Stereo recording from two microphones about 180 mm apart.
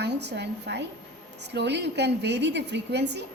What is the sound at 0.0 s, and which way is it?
A woman's voice, 70° right (ahead or behind).